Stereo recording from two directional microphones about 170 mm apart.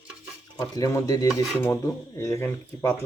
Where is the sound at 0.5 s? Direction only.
20° left (ahead or behind).